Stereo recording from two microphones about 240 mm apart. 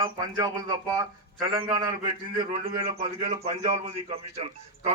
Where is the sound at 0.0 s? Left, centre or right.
Centre.